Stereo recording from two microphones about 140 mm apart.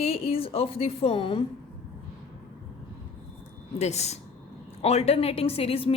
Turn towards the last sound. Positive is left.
turn(degrees=45)  # may be behind; listen again after turning